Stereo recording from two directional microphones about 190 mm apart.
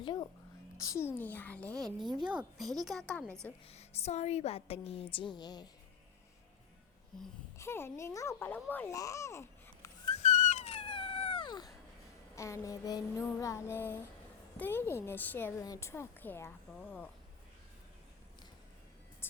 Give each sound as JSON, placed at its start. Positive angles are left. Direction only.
{"t": 0.0, "sound": "a sound", "side_deg": 25}
{"t": 0.8, "sound": "a woman's voice", "side_deg": 15}
{"t": 3.7, "sound": "a woman's voice", "side_deg": 35}
{"t": 7.6, "sound": "a woman's voice", "side_deg": 10}
{"t": 10.2, "sound": "cat", "side_deg": 40}
{"t": 12.4, "sound": "a woman's voice", "side_deg": 15}
{"t": 19.2, "sound": "music", "side_deg": 10}